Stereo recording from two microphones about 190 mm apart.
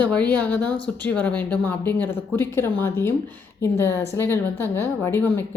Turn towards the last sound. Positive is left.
turn(degrees=10)  # may be behind; listen again after turning